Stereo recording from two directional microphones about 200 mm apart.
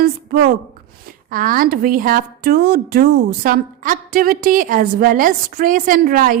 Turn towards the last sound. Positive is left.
turn(degrees=-45)  # may be behind; listen again after turning